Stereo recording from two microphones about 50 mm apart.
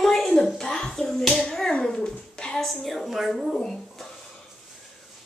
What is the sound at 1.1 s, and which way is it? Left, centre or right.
Hands, centre.